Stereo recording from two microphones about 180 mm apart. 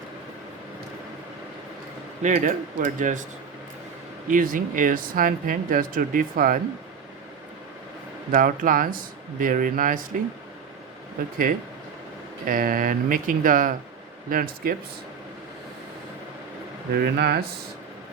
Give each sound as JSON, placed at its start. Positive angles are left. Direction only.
{"t": 2.2, "sound": "speech", "side_deg": -45}
{"t": 4.3, "sound": "speech", "side_deg": -50}
{"t": 8.3, "sound": "speech", "side_deg": -50}
{"t": 12.5, "sound": "speech", "side_deg": -50}
{"t": 16.9, "sound": "speech", "side_deg": -60}